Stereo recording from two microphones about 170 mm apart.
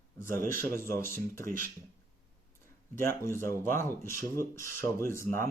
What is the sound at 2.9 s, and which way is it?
Speech, 15° left (ahead or behind).